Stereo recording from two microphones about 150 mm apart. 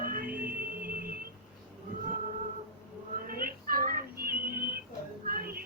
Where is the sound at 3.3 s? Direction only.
75° right (ahead or behind).